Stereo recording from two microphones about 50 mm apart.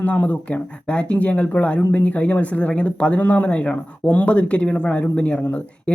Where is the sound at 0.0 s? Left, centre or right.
Left.